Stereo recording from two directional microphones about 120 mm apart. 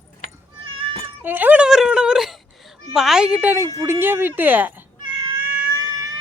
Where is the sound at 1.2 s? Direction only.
15° right (ahead or behind).